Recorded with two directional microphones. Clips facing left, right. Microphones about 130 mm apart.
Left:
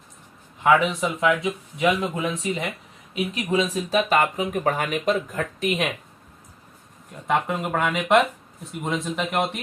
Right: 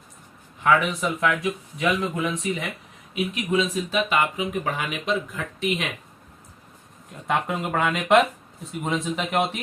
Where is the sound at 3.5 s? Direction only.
40° left (ahead or behind).